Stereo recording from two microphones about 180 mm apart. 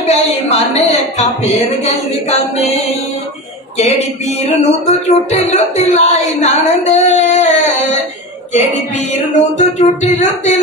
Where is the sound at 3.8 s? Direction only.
40° left (ahead or behind).